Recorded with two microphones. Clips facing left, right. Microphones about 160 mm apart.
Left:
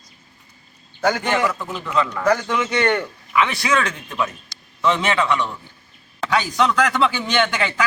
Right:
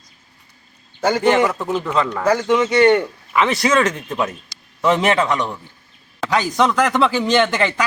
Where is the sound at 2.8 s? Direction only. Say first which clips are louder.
Right 8 dB; 15° right (ahead or behind).